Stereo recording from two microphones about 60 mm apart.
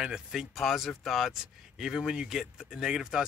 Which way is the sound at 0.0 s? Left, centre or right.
Centre.